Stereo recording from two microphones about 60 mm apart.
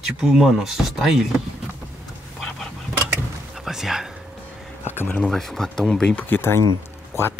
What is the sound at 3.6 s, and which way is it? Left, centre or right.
Speech, centre.